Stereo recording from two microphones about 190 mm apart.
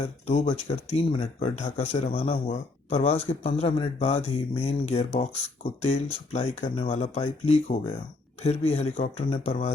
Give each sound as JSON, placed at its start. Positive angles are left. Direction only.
{"t": 0.3, "sound": "speech", "side_deg": 35}